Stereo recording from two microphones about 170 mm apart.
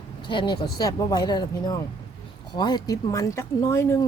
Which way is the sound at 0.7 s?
20° left (ahead or behind).